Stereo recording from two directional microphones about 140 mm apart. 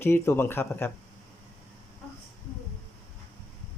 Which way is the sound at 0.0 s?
15° left (ahead or behind).